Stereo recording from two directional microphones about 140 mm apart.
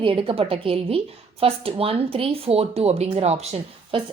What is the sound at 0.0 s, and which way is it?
A woman's voice, 40° right (ahead or behind).